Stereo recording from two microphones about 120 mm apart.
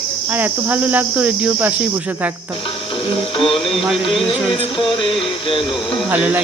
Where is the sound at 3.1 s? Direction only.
50° left (ahead or behind).